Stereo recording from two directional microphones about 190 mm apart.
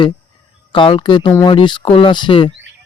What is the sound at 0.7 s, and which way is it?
Speech, 25° left (ahead or behind).